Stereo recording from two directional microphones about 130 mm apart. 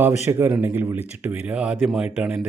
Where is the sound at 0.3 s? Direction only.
15° right (ahead or behind).